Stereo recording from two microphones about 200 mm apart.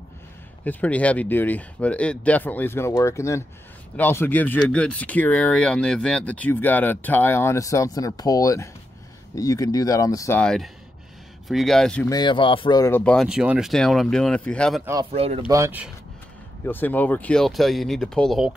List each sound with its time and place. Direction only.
0.7 s speech: 5° left (ahead or behind)
10.4 s speech: 5° left (ahead or behind)
12.1 s speech: 20° left (ahead or behind); by 14.8 s 5° left (ahead or behind)
14.9 s speech: 25° right (ahead or behind)
15.4 s speech: 10° right (ahead or behind)
16.6 s speech: 10° left (ahead or behind)